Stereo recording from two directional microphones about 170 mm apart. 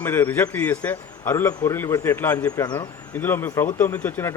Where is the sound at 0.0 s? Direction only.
10° left (ahead or behind).